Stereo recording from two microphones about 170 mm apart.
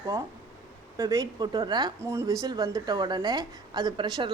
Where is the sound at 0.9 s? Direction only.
20° right (ahead or behind).